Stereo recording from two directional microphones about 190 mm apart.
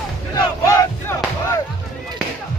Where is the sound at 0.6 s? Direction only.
15° left (ahead or behind).